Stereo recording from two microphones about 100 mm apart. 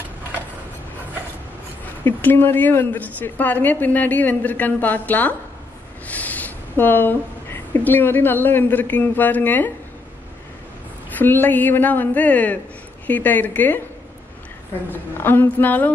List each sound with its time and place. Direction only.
2.0 s a woman's voice: 20° left (ahead or behind)
11.1 s a woman's voice: 20° left (ahead or behind)
14.9 s a sound: 20° left (ahead or behind)